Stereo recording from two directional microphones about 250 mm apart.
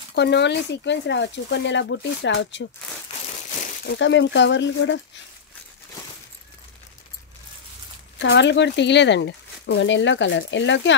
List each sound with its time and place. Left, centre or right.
0.1 s speech: left
3.6 s speech: left
8.2 s speech: left